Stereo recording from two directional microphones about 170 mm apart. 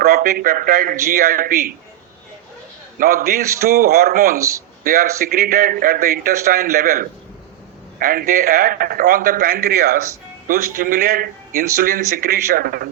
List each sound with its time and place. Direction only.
0.0 s a man's voice: 60° right (ahead or behind)
3.0 s a man's voice: 55° right (ahead or behind)